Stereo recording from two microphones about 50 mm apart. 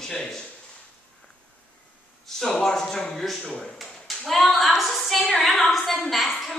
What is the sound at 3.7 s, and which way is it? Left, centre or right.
A woman's voice, centre.